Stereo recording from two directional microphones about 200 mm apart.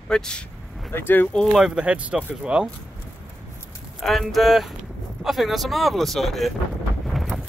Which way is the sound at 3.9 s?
Centre (ahead or behind).